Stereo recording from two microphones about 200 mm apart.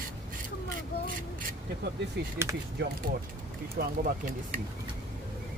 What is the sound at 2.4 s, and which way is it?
Speech, 15° right (ahead or behind).